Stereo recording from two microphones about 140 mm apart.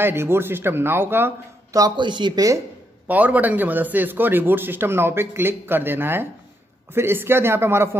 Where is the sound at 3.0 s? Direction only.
10° right (ahead or behind).